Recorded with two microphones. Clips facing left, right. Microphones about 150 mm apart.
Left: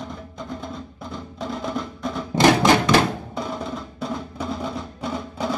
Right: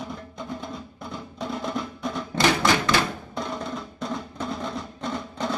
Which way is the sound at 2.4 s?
45° left (ahead or behind).